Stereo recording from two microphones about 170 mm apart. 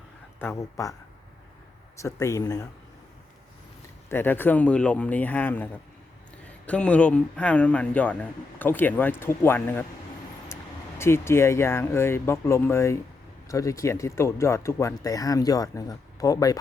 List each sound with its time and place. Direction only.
0.3 s a man's voice: 15° left (ahead or behind)
2.0 s speech: 20° left (ahead or behind)
4.1 s a man's voice: 10° left (ahead or behind)